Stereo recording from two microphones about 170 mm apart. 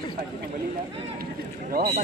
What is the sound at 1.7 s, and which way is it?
Speech, 65° right (ahead or behind).